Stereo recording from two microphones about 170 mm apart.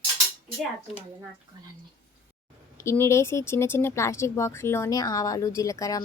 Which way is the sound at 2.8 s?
15° left (ahead or behind).